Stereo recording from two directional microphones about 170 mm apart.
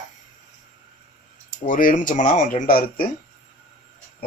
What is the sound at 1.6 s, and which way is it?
Speech, 50° left (ahead or behind).